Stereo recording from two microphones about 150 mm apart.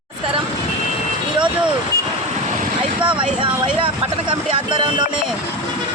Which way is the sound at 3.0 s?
35° right (ahead or behind).